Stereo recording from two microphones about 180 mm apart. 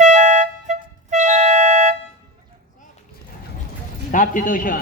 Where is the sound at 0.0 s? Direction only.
40° right (ahead or behind).